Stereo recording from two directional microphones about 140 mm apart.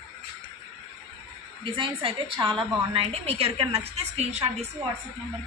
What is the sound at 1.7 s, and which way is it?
A woman's voice, 35° right (ahead or behind).